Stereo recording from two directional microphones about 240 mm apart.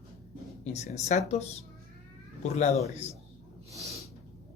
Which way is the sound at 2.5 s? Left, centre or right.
Left.